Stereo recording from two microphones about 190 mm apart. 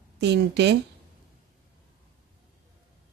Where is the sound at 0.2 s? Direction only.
65° right (ahead or behind).